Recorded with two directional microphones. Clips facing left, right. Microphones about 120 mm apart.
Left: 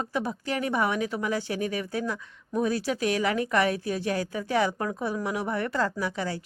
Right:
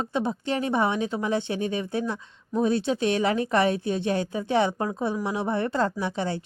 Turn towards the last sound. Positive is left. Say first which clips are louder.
# right 2 dB
turn(degrees=-25)  # may be behind; listen again after turning